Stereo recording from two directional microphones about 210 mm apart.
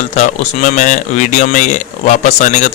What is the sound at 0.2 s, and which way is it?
Speech, 35° left (ahead or behind).